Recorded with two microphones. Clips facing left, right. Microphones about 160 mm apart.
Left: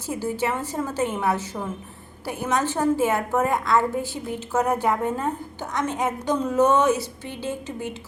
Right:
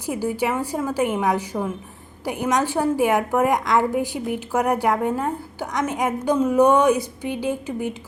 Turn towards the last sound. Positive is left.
turn(degrees=-15)  # may be behind; listen again after turning